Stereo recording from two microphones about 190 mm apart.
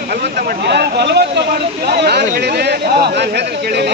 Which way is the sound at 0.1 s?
55° right (ahead or behind).